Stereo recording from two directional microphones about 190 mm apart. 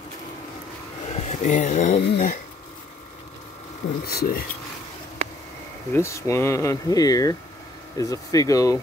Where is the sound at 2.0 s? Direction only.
60° left (ahead or behind).